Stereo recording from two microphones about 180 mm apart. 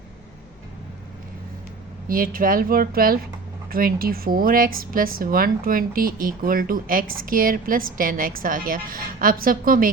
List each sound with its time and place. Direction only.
2.0 s speech: 50° right (ahead or behind)